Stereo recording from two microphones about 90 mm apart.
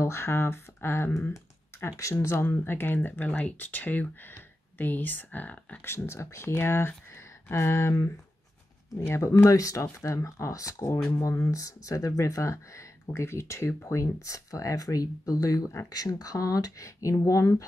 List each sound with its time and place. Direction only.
0.0 s speech: 30° left (ahead or behind)
5.9 s speech: 30° left (ahead or behind)